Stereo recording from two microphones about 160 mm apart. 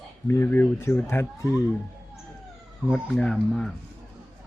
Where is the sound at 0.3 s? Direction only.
15° left (ahead or behind).